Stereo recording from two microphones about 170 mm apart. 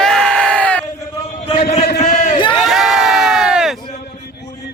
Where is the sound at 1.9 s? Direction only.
45° left (ahead or behind).